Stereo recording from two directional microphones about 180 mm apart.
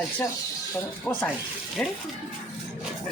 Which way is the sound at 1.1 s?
15° left (ahead or behind).